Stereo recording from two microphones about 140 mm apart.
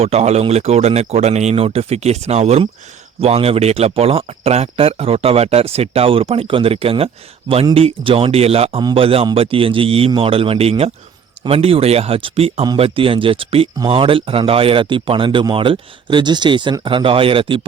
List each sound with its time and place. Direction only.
0.0 s speech: 50° right (ahead or behind)
8.8 s speech: 30° right (ahead or behind)
9.0 s speech: 40° right (ahead or behind)